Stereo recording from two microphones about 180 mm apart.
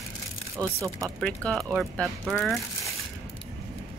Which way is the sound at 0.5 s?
15° right (ahead or behind).